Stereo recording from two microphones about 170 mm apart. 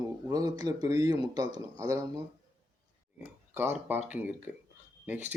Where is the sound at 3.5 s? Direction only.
15° right (ahead or behind).